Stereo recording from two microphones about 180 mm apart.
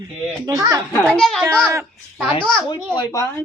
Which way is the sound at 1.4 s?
15° right (ahead or behind).